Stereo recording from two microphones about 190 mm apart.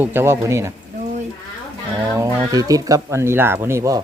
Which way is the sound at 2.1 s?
20° right (ahead or behind).